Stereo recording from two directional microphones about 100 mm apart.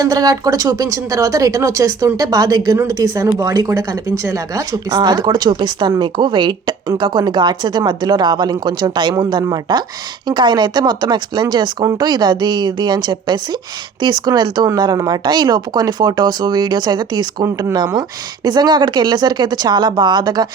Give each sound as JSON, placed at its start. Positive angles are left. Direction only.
{"t": 0.0, "sound": "speech", "side_deg": -40}